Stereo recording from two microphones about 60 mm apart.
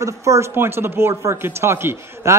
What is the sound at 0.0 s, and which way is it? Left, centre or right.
Speech, right.